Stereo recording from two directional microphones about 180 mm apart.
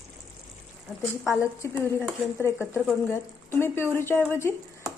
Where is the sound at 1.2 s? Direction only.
15° left (ahead or behind).